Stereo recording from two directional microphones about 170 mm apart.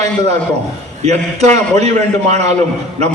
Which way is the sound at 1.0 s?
40° right (ahead or behind).